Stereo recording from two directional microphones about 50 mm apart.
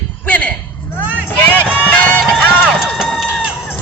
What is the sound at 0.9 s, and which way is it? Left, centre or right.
Vehicle, left.